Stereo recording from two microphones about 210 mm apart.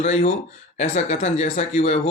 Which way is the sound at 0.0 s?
35° left (ahead or behind).